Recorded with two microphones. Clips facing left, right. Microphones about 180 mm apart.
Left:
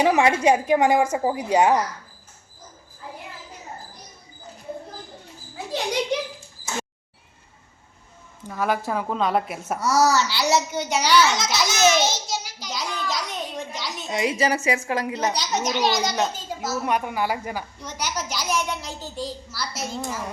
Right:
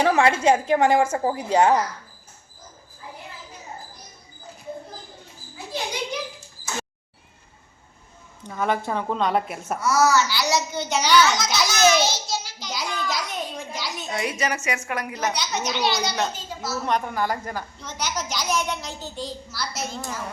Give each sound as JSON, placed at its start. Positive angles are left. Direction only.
{"t": 0.0, "sound": "a woman's voice", "side_deg": 15}
{"t": 5.7, "sound": "a sound", "side_deg": 75}
{"t": 8.4, "sound": "a woman's voice", "side_deg": 0}
{"t": 9.8, "sound": "a woman's voice", "side_deg": 35}
{"t": 10.8, "sound": "a woman's voice", "side_deg": 10}
{"t": 11.7, "sound": "a sound", "side_deg": 25}
{"t": 12.7, "sound": "a woman's voice", "side_deg": 0}
{"t": 14.1, "sound": "a woman's voice", "side_deg": 25}
{"t": 16.8, "sound": "a woman's voice", "side_deg": 10}